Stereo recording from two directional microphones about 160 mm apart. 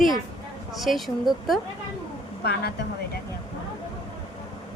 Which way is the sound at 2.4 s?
90° left.